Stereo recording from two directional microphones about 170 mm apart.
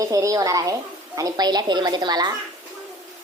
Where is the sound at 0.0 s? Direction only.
20° right (ahead or behind).